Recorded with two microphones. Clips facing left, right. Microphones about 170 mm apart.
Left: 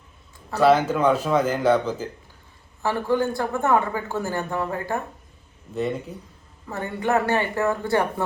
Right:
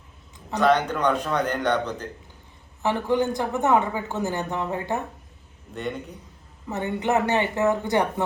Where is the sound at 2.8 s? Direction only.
20° right (ahead or behind).